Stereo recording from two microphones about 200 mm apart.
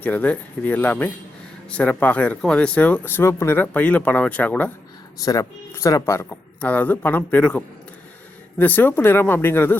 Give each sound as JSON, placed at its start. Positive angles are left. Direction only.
{"t": 0.0, "sound": "speech", "side_deg": 10}